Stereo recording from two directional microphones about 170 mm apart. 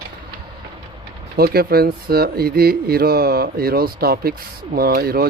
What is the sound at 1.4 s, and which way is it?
Speech, 65° right (ahead or behind).